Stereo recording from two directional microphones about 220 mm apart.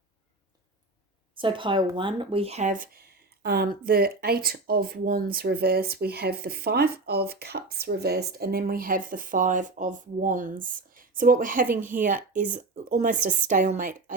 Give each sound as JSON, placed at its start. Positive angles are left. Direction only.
{"t": 1.4, "sound": "speech", "side_deg": -20}
{"t": 11.7, "sound": "speech", "side_deg": -10}
{"t": 12.3, "sound": "speech", "side_deg": -35}